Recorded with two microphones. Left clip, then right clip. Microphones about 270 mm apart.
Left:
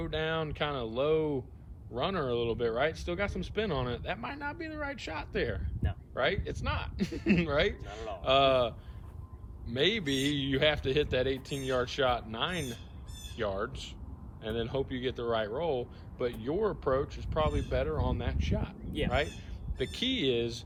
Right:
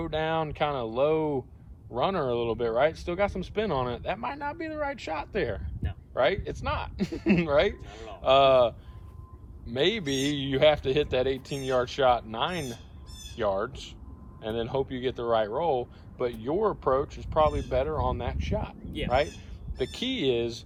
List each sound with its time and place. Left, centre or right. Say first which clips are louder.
0.0 s speech: right 5 dB; centre
19.8 s speech: right 2 dB; centre